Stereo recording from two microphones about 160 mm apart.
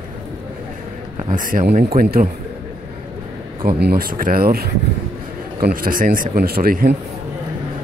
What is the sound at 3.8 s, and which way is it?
Speech, 70° right (ahead or behind).